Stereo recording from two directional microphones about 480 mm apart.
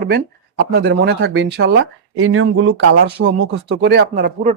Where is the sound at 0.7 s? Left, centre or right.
Centre.